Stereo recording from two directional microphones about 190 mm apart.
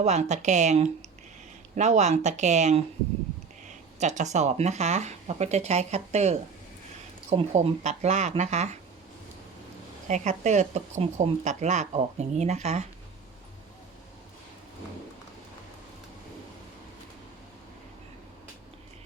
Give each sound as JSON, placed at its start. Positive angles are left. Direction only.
{"t": 0.0, "sound": "speech", "side_deg": -35}
{"t": 4.0, "sound": "speech", "side_deg": -40}
{"t": 10.1, "sound": "speech", "side_deg": -35}